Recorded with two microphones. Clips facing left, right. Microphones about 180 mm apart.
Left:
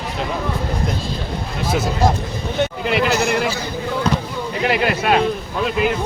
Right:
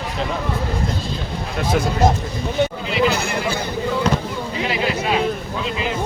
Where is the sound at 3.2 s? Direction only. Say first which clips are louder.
Left 6 dB; 60° left (ahead or behind).